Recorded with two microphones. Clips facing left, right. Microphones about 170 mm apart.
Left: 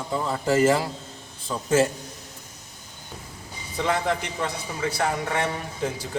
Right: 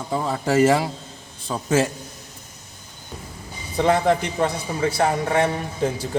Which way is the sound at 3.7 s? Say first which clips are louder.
Right 6 dB; 35° right (ahead or behind).